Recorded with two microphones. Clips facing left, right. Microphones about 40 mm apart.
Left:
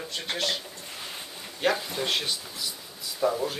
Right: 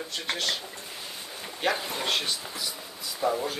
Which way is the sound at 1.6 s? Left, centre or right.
Centre.